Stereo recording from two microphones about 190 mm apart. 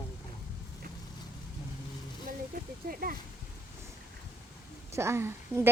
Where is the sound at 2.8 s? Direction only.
50° right (ahead or behind).